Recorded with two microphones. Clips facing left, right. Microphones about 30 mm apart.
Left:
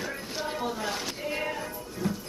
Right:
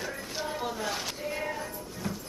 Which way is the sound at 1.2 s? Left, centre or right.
Left.